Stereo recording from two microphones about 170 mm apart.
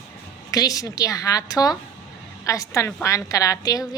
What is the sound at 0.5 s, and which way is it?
A woman's voice, 20° left (ahead or behind).